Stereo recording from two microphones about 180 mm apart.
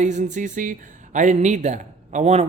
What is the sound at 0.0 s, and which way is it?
Speech, 40° right (ahead or behind).